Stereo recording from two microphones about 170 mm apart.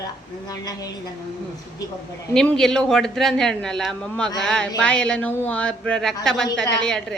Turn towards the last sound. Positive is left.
turn(degrees=5)  # may be behind; listen again after turning